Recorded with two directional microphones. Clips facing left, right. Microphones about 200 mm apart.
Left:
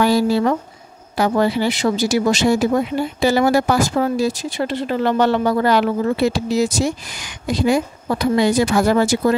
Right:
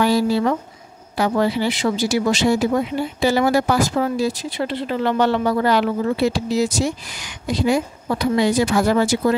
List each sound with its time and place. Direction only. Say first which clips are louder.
0.0 s speech: left 2 dB; 45° left (ahead or behind)